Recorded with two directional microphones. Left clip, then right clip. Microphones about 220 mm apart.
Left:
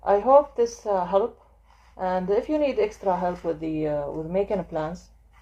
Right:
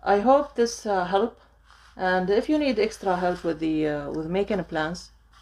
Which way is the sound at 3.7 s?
45° right (ahead or behind).